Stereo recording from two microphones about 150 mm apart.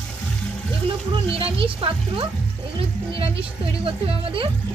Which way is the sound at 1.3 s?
40° right (ahead or behind).